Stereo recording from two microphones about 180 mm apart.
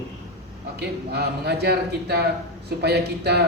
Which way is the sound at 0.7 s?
65° right (ahead or behind).